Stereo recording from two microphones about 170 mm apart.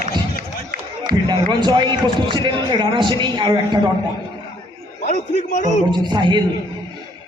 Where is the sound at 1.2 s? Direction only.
25° right (ahead or behind).